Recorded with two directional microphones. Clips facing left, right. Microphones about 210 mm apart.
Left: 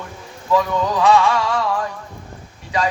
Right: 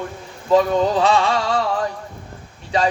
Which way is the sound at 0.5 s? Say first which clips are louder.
Right 3 dB; 30° right (ahead or behind).